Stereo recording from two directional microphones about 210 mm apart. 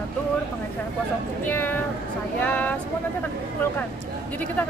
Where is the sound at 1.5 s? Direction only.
10° left (ahead or behind).